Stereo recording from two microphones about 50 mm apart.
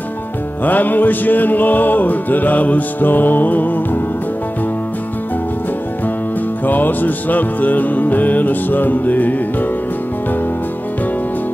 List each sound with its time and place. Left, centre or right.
0.7 s music: left
6.6 s music: left